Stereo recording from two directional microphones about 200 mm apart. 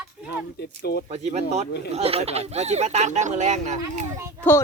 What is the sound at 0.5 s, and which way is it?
Speech, 55° left (ahead or behind).